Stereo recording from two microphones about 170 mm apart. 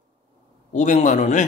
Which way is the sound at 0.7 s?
45° left (ahead or behind).